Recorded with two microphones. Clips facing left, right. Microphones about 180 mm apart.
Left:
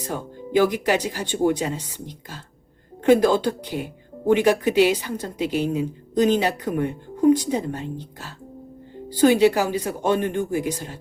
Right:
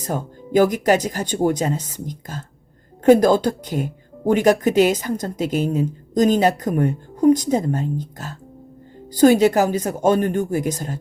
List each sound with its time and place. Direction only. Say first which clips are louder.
0.0 s speech: right 3 dB; 45° right (ahead or behind)